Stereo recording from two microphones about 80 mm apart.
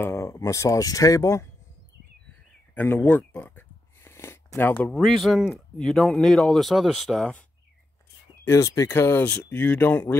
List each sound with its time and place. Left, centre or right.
0.0 s speech: left
2.7 s a sound: left
4.1 s a sound: left
4.6 s speech: left
4.9 s speech: centre
8.5 s speech: left
9.4 s speech: left